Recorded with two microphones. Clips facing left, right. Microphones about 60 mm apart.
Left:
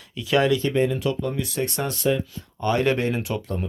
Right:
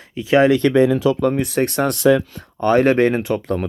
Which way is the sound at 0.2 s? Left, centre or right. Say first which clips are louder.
Right 7 dB; right.